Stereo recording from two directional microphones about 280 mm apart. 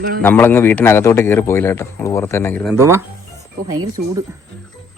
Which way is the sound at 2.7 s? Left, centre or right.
Centre.